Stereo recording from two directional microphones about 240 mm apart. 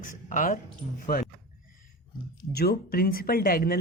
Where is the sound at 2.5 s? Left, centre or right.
Left.